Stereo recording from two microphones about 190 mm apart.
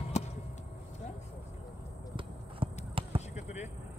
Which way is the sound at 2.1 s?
30° right (ahead or behind).